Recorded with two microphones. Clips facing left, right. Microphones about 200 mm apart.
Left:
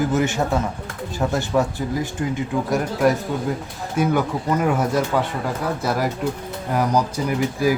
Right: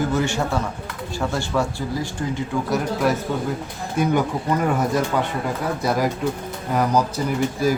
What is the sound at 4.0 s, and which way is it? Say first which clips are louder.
Speech: even; 5° left (ahead or behind).